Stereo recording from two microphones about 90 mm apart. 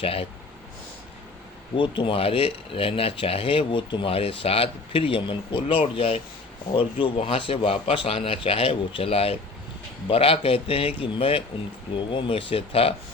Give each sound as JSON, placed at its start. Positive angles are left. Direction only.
{"t": 0.0, "sound": "speech", "side_deg": 90}
{"t": 1.7, "sound": "speech", "side_deg": 70}
{"t": 12.1, "sound": "speech", "side_deg": 75}